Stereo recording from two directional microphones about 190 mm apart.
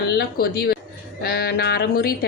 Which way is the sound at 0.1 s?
55° left (ahead or behind).